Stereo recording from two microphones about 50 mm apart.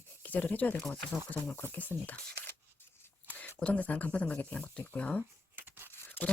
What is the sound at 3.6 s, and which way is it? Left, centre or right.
Speech, left.